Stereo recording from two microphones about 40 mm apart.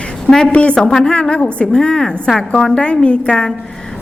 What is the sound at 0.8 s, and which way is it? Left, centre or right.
Speech, centre.